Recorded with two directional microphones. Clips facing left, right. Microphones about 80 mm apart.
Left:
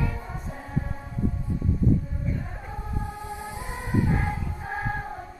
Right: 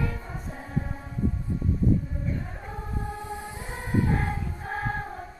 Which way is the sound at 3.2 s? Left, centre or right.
Centre.